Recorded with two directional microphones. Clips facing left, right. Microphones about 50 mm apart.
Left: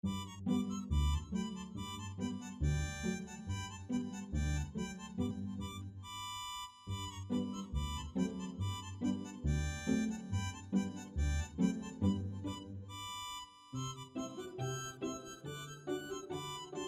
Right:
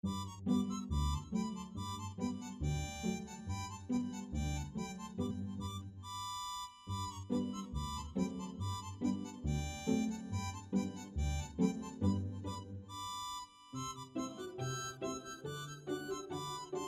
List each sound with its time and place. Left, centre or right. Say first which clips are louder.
0.0 s music: even; left
14.1 s music: right 1 dB; left